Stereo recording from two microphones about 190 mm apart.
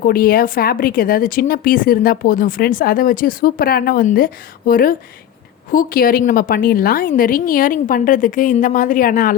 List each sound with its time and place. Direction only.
0.0 s speech: 50° left (ahead or behind)